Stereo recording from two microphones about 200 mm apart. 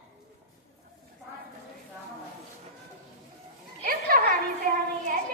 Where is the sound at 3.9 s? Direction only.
45° right (ahead or behind).